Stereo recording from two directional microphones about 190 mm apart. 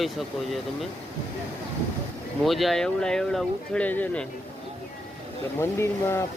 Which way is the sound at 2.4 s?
Centre (ahead or behind).